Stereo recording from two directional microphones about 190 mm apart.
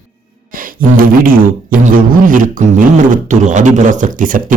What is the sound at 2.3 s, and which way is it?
A man's voice, 45° right (ahead or behind).